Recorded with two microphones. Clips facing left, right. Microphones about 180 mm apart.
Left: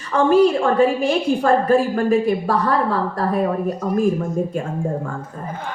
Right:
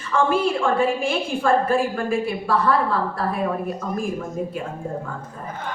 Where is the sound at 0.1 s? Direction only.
40° left (ahead or behind).